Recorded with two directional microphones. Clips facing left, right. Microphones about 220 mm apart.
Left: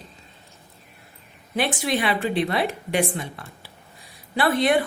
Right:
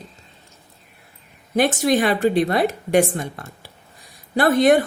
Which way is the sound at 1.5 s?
45° right (ahead or behind).